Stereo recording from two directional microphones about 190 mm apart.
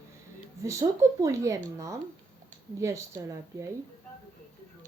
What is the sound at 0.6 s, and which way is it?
Speech, 15° right (ahead or behind).